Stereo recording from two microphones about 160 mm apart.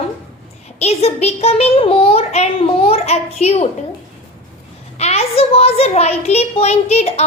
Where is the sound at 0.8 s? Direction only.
40° left (ahead or behind).